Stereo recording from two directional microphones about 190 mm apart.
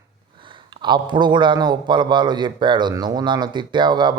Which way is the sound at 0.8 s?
25° right (ahead or behind).